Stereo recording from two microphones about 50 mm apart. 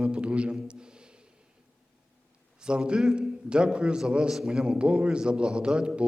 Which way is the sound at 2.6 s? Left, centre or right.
Centre.